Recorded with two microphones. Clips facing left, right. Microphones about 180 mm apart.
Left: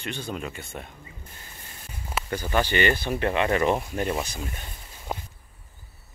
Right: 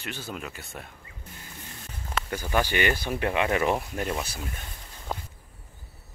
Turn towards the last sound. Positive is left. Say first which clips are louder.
# left 1 dB
turn(degrees=15)  # may be behind; listen again after turning